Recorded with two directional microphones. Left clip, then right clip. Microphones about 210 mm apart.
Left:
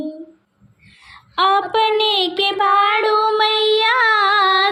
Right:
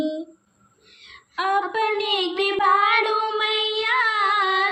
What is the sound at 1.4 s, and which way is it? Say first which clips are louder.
Speech: left 7 dB; 35° left (ahead or behind).